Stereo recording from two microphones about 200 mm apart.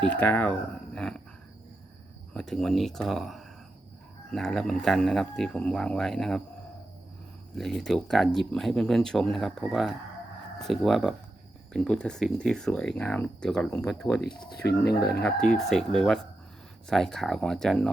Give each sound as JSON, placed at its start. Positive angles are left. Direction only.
{"t": 0.1, "sound": "speech", "side_deg": 10}
{"t": 0.9, "sound": "a sound", "side_deg": 5}
{"t": 2.3, "sound": "speech", "side_deg": 0}
{"t": 7.5, "sound": "speech", "side_deg": 0}
{"t": 14.7, "sound": "speech", "side_deg": 55}
{"t": 15.2, "sound": "speech", "side_deg": 5}